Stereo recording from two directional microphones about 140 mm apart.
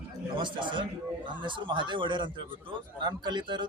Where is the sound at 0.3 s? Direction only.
35° right (ahead or behind).